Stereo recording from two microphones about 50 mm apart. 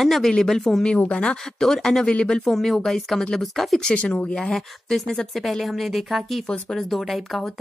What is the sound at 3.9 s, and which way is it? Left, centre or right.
Speech, left.